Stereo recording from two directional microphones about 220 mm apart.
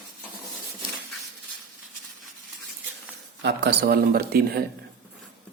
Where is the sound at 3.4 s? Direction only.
50° right (ahead or behind).